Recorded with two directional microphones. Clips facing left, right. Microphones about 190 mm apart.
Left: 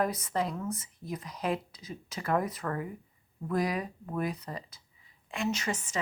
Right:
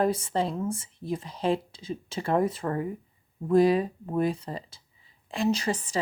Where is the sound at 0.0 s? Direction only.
30° right (ahead or behind).